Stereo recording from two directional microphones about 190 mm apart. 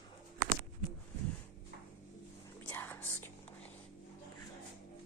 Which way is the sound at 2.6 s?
10° left (ahead or behind).